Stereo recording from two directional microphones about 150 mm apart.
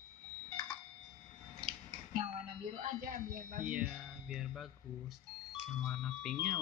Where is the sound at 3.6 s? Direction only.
5° right (ahead or behind).